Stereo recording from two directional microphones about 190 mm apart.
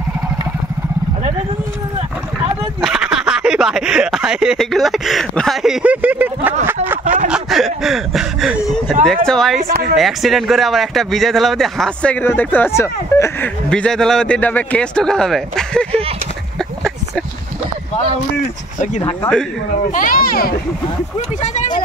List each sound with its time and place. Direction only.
2.8 s speech: 5° right (ahead or behind); by 13.5 s 15° left (ahead or behind)
13.7 s speech: 5° left (ahead or behind)
19.9 s speech: 45° left (ahead or behind)
21.4 s speech: 40° left (ahead or behind)